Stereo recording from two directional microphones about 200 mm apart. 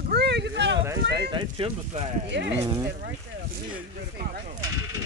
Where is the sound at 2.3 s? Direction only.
60° right (ahead or behind).